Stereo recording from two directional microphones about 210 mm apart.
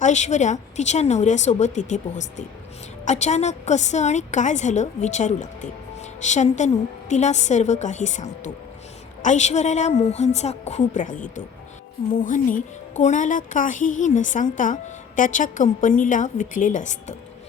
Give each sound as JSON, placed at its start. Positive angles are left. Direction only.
{"t": 0.0, "sound": "speech", "side_deg": 35}